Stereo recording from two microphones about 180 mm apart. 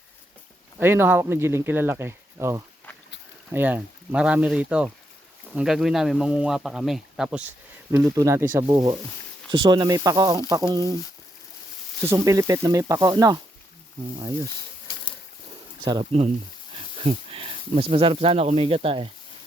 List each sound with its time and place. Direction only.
0.8 s a man's voice: 10° right (ahead or behind)
7.9 s speech: 15° right (ahead or behind)
8.6 s speech: 25° right (ahead or behind)
12.0 s speech: 15° right (ahead or behind)
15.8 s speech: 20° right (ahead or behind)